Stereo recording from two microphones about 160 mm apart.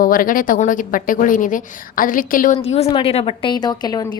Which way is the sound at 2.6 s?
40° left (ahead or behind).